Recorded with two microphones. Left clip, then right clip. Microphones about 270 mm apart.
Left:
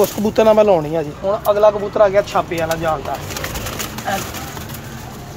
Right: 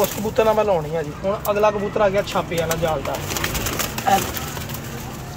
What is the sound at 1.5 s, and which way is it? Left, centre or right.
Speech, left.